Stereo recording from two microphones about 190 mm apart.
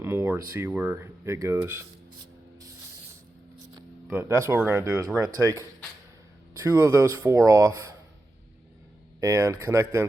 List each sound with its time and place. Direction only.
0.0 s speech: 10° right (ahead or behind)
4.1 s speech: 15° right (ahead or behind)
6.7 s speech: 15° right (ahead or behind)
9.2 s speech: 15° right (ahead or behind)